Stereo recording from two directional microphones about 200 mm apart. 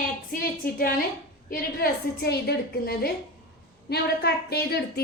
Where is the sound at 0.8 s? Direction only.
45° left (ahead or behind).